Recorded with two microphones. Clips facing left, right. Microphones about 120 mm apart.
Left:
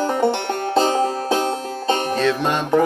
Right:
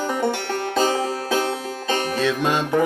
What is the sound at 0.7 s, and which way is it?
Music, 30° left (ahead or behind).